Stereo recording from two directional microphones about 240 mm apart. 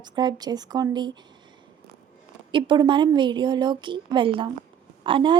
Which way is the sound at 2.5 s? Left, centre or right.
Right.